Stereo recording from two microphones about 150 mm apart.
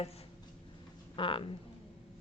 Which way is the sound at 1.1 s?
35° left (ahead or behind).